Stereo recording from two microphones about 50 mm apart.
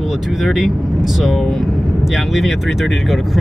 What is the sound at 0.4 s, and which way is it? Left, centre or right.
Speech, centre.